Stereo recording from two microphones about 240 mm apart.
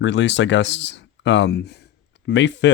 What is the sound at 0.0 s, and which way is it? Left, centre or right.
Speech, left.